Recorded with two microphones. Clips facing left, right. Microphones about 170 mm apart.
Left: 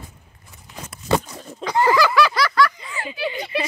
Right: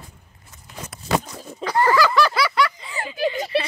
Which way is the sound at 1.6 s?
15° left (ahead or behind).